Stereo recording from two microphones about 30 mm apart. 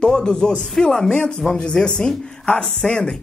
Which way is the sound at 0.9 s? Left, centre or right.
Centre.